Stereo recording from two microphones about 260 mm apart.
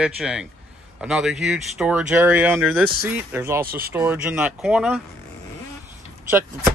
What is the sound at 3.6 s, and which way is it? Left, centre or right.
Speech, right.